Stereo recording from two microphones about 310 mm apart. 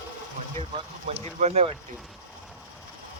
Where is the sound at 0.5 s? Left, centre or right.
Centre.